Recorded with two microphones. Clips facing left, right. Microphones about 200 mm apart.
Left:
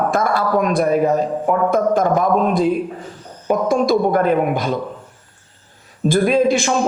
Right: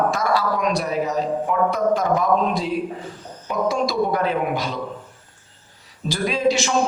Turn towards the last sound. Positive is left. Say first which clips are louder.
# left 5 dB
turn(degrees=55)  # may be behind; listen again after turning